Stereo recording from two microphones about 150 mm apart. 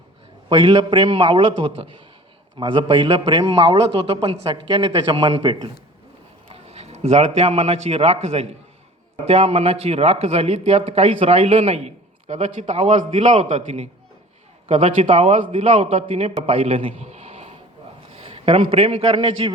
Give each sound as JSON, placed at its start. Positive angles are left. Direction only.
{"t": 0.5, "sound": "a man's voice", "side_deg": -35}
{"t": 6.5, "sound": "a man's voice", "side_deg": -45}